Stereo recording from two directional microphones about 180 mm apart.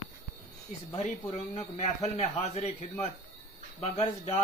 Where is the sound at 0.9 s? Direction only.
35° left (ahead or behind).